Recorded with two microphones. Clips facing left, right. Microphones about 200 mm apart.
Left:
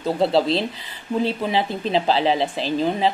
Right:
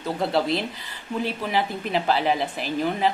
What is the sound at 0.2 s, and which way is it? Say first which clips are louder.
Speech: left 4 dB; 25° left (ahead or behind).